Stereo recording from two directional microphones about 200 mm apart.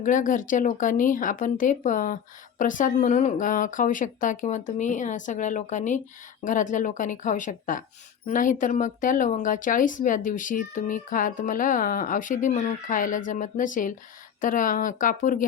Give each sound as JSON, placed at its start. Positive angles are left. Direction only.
{"t": 0.0, "sound": "speech", "side_deg": 40}